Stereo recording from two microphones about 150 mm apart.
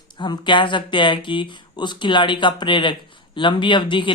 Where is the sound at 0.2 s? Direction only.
30° left (ahead or behind).